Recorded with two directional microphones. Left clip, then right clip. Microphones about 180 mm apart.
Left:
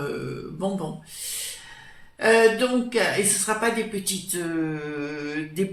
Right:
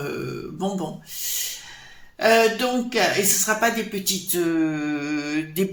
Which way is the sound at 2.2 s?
35° right (ahead or behind).